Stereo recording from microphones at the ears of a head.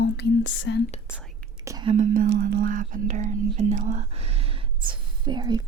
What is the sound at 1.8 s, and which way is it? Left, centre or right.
Speech, right.